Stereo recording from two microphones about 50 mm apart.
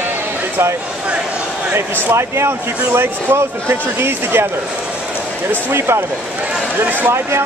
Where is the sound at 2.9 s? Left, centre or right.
Right.